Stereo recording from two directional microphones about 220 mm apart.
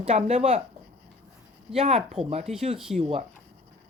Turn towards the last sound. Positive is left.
turn(degrees=-25)  # may be behind; listen again after turning